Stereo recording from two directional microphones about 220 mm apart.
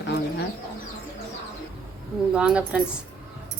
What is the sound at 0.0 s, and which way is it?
Bird, 50° left (ahead or behind).